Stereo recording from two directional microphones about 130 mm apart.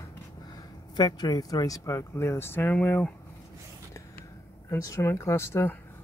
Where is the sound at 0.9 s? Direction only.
30° left (ahead or behind); by 3.1 s 15° left (ahead or behind).